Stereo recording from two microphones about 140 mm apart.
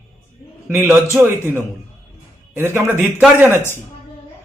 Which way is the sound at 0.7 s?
15° right (ahead or behind).